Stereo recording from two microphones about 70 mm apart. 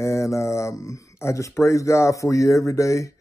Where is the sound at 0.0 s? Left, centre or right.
Left.